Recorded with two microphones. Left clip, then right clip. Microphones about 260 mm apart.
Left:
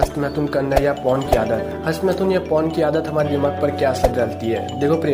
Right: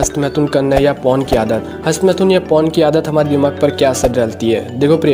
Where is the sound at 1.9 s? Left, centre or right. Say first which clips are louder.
Right 7 dB; right.